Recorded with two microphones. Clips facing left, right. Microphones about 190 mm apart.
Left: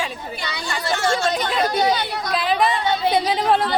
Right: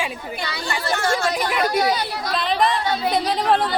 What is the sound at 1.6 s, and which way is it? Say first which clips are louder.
Speech: left 1 dB; 25° left (ahead or behind).